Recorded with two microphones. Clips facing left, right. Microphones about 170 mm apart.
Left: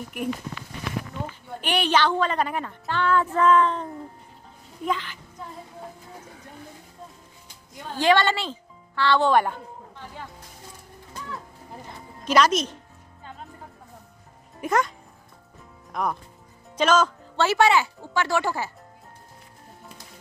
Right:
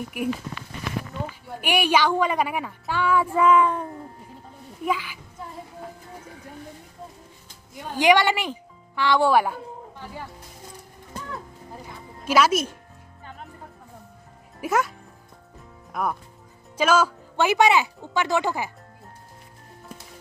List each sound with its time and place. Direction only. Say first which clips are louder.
0.2 s speech: right 2 dB; 10° right (ahead or behind)
1.6 s speech: right 1 dB; 10° right (ahead or behind)
7.9 s speech: right 2 dB; 15° right (ahead or behind)
11.8 s speech: left 1 dB; 5° right (ahead or behind)
14.6 s a child's voice: even; 5° right (ahead or behind)